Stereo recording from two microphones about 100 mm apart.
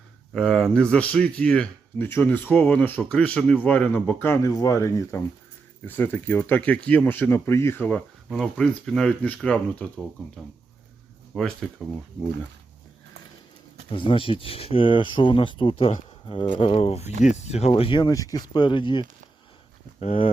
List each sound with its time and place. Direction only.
0.3 s speech: 5° left (ahead or behind)
2.0 s speech: 20° left (ahead or behind)
4.4 s speech: 35° left (ahead or behind)
5.8 s speech: 20° left (ahead or behind)
7.9 s speech: 5° left (ahead or behind)
11.3 s speech: 5° left (ahead or behind)
13.9 s speech: 60° left (ahead or behind)
18.1 s speech: 35° left (ahead or behind)
20.0 s speech: 80° left